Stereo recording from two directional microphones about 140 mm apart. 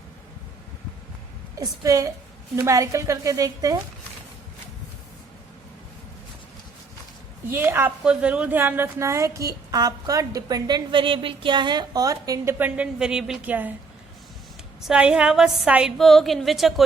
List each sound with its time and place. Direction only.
1.5 s a woman's voice: 25° right (ahead or behind)
7.5 s a woman's voice: 15° right (ahead or behind)
12.5 s a woman's voice: 10° right (ahead or behind)
14.8 s a woman's voice: 5° right (ahead or behind)